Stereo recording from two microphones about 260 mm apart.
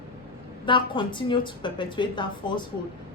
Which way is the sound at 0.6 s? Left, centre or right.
Centre.